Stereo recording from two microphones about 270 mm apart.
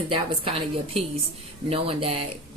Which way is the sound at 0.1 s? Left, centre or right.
Right.